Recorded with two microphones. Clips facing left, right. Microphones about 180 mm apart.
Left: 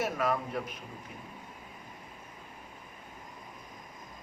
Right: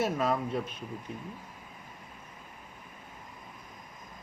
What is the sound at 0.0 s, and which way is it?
Speech, 25° right (ahead or behind).